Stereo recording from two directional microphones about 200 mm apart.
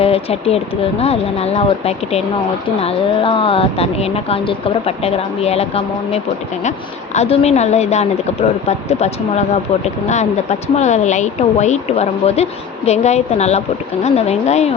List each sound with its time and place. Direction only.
0.0 s a woman's voice: 30° left (ahead or behind)